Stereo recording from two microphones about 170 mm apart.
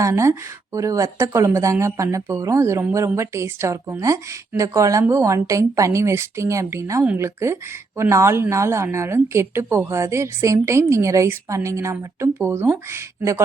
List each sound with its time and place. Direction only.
0.0 s speech: 15° right (ahead or behind)